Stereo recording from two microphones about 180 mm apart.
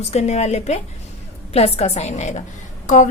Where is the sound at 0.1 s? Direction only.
40° left (ahead or behind).